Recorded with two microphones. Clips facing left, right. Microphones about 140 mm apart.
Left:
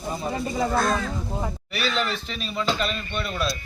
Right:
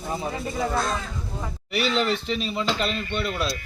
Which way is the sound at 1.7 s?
25° right (ahead or behind).